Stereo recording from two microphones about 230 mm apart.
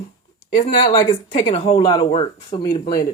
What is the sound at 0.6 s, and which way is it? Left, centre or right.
Speech, left.